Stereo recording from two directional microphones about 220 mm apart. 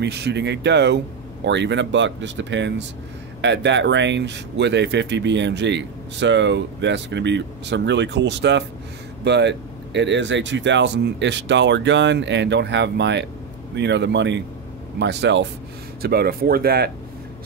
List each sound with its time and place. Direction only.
0.0 s speech: 50° right (ahead or behind)